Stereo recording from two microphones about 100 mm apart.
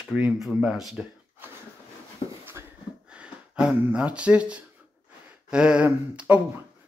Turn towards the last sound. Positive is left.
turn(degrees=-15)  # may be behind; listen again after turning